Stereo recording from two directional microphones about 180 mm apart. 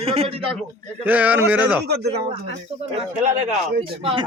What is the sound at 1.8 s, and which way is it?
Speech, 65° right (ahead or behind).